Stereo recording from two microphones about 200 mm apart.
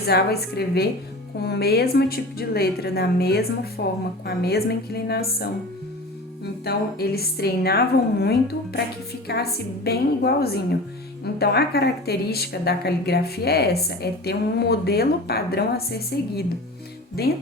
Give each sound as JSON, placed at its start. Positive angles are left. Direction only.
{"t": 0.1, "sound": "a woman's voice", "side_deg": 50}